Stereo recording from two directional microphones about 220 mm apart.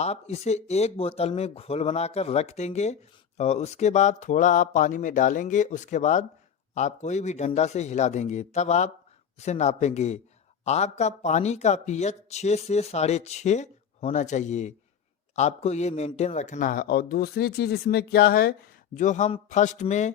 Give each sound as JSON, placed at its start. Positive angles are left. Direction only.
{"t": 0.0, "sound": "a man's voice", "side_deg": 30}